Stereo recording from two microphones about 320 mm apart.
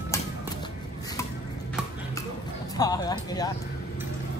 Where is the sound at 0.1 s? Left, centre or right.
Centre.